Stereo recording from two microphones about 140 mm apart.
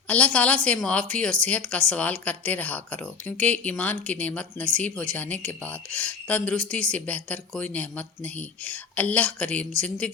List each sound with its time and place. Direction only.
0.1 s a woman's voice: 10° left (ahead or behind)